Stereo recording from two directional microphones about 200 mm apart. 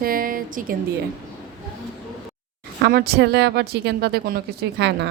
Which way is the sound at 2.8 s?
55° right (ahead or behind).